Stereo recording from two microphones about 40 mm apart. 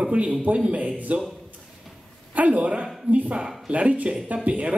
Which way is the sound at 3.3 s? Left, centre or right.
Centre.